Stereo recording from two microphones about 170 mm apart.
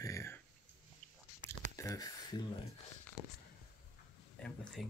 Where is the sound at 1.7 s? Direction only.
20° left (ahead or behind).